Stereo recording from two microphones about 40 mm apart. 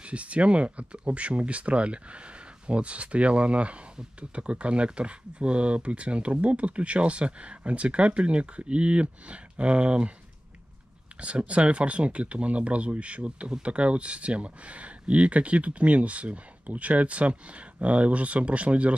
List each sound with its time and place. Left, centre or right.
0.0 s speech: right
11.1 s speech: right